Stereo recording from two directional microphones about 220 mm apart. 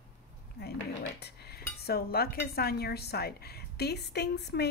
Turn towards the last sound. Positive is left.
turn(degrees=50)  # may be behind; listen again after turning